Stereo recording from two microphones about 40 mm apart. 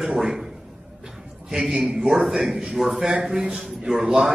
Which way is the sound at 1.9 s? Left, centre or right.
Centre.